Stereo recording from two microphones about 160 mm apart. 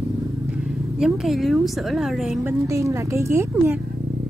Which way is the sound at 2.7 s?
20° right (ahead or behind).